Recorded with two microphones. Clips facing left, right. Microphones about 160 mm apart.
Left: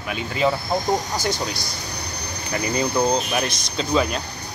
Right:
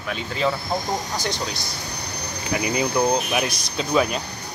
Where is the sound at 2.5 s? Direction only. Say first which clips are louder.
Even; 10° right (ahead or behind).